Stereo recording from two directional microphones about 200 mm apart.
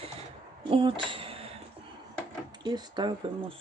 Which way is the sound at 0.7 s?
25° right (ahead or behind).